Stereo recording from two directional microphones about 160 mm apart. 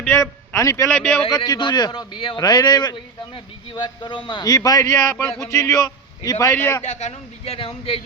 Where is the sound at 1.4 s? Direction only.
30° left (ahead or behind).